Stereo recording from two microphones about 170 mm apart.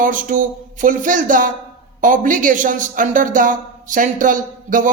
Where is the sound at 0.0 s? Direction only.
50° right (ahead or behind).